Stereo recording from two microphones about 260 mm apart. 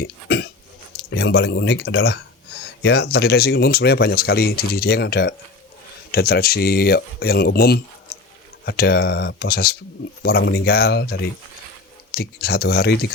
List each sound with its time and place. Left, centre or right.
0.0 s hiccup: left
0.9 s speech: left